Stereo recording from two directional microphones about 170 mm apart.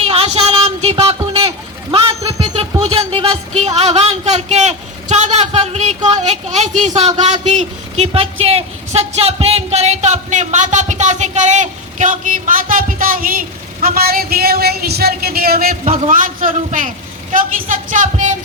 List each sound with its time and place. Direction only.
0.0 s a sound: 35° right (ahead or behind)
7.2 s a woman's voice: 45° right (ahead or behind); by 15.7 s 60° right (ahead or behind)
15.8 s a woman's voice: 45° right (ahead or behind)